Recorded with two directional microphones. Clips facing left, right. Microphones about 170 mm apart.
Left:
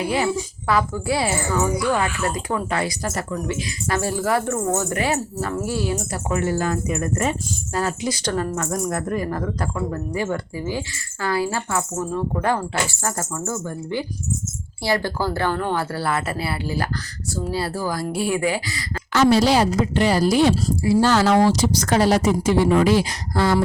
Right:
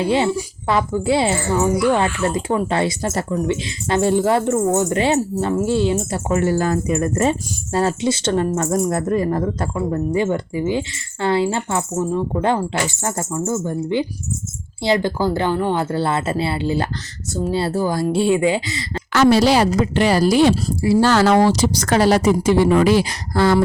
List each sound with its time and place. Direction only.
0.0 s speech: 25° right (ahead or behind)
19.1 s a woman's voice: 75° right (ahead or behind)